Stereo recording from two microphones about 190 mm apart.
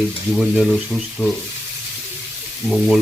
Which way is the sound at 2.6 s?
Centre (ahead or behind).